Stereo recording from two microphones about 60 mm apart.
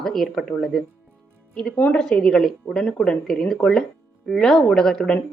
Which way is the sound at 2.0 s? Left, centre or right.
Centre.